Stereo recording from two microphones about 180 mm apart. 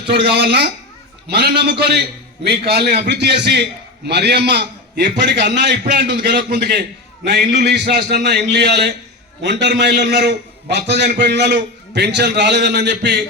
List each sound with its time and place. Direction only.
0.1 s a man's voice: 60° right (ahead or behind)